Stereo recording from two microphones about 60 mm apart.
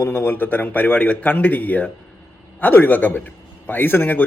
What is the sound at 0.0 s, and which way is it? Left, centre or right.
A man's voice, left.